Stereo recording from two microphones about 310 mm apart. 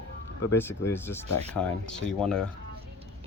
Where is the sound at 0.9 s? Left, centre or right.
Centre.